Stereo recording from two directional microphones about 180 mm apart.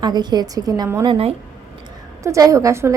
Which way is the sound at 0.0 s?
25° right (ahead or behind).